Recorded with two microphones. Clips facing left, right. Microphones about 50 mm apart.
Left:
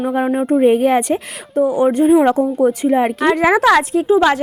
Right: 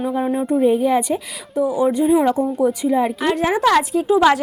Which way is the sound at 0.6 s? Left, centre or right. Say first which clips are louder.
Left 3 dB; left.